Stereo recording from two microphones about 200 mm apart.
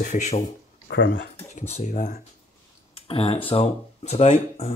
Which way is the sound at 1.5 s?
35° left (ahead or behind).